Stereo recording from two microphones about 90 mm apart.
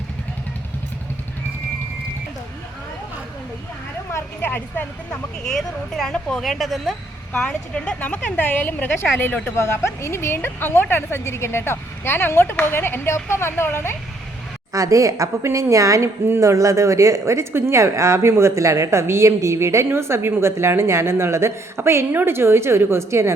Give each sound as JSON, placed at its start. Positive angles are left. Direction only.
{"t": 4.1, "sound": "a sound", "side_deg": 25}
{"t": 5.4, "sound": "a woman's voice", "side_deg": 5}
{"t": 14.7, "sound": "a woman's voice", "side_deg": -40}